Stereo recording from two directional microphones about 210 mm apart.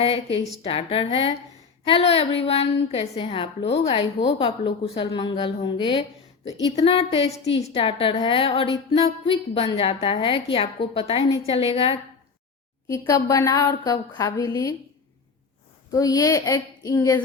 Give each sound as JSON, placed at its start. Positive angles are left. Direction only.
{"t": 0.0, "sound": "a woman's voice", "side_deg": 25}
{"t": 12.9, "sound": "a woman's voice", "side_deg": 15}
{"t": 15.9, "sound": "a woman's voice", "side_deg": 15}